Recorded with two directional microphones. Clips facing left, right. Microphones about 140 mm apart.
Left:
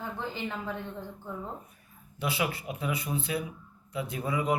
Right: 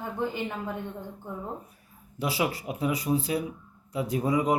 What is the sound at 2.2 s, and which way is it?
Speech, 35° right (ahead or behind).